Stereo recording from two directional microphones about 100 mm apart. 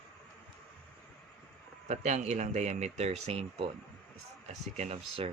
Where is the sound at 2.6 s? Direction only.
90° right; by 3.7 s 70° right (ahead or behind).